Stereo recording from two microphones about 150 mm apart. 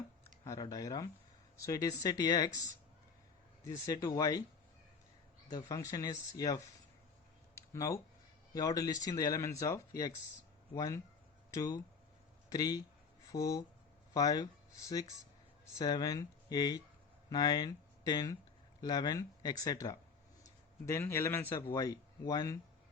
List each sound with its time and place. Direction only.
0.4 s speech: 25° left (ahead or behind)
3.6 s speech: 25° left (ahead or behind)
5.5 s speech: 25° left (ahead or behind)
7.5 s a sound: 20° left (ahead or behind)
8.5 s speech: 25° left (ahead or behind)